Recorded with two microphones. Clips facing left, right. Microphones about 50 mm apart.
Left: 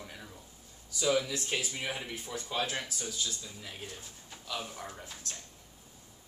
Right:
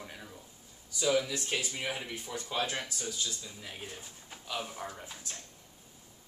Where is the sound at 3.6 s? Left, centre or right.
Centre.